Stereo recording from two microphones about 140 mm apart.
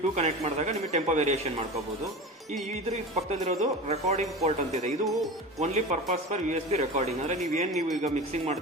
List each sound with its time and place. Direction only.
0.2 s speech: 55° right (ahead or behind)
3.2 s speech: 55° right (ahead or behind)